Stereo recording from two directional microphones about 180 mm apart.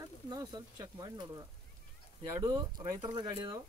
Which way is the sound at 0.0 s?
20° right (ahead or behind).